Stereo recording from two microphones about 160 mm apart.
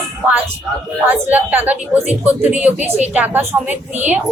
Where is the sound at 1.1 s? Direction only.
10° right (ahead or behind).